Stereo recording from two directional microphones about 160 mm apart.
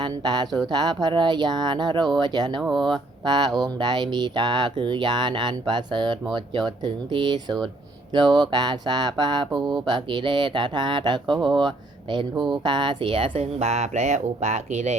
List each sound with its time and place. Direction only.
0.0 s speech: 25° right (ahead or behind)
2.6 s speech: centre (ahead or behind)
3.2 s speech: 25° right (ahead or behind); by 14.9 s 45° right (ahead or behind)